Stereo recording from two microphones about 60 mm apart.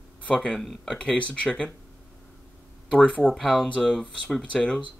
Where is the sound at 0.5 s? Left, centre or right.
Centre.